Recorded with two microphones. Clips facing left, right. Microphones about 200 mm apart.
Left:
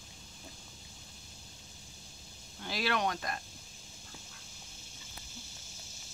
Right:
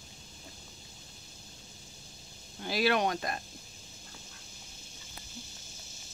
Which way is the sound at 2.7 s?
10° right (ahead or behind).